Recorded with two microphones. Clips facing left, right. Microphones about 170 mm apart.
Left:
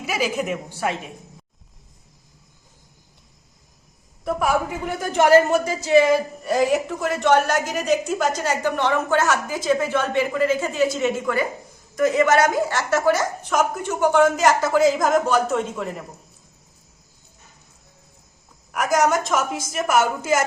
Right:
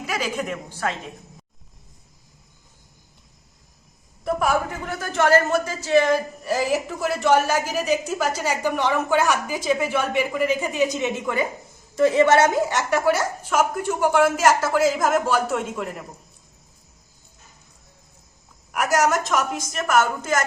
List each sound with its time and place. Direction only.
0.0 s a woman's voice: 5° left (ahead or behind)
4.2 s a woman's voice: centre (ahead or behind)
4.9 s a man's voice: 15° left (ahead or behind); by 13.0 s 20° right (ahead or behind)
13.1 s speech: 5° right (ahead or behind)
18.7 s speech: 5° right (ahead or behind)